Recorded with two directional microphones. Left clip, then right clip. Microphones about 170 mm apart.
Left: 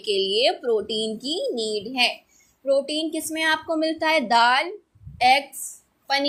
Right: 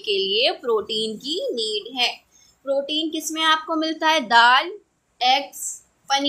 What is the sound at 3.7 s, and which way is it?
Speech, 15° left (ahead or behind).